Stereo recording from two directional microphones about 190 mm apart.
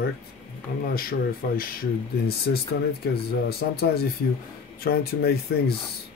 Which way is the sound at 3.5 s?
55° left (ahead or behind).